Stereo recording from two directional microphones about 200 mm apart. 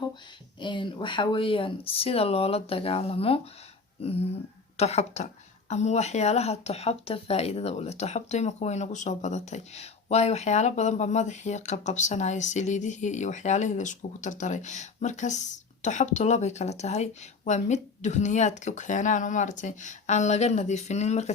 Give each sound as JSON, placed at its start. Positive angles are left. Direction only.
{"t": 0.6, "sound": "speech", "side_deg": 25}
{"t": 4.8, "sound": "a woman's voice", "side_deg": 35}